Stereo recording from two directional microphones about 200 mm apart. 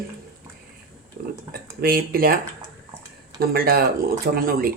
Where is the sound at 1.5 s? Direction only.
50° right (ahead or behind).